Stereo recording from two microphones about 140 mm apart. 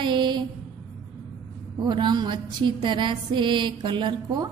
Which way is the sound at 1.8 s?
30° right (ahead or behind).